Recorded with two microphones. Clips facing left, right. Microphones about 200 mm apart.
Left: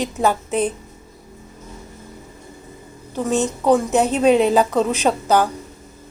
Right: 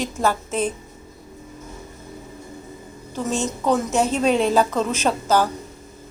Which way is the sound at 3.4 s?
15° left (ahead or behind).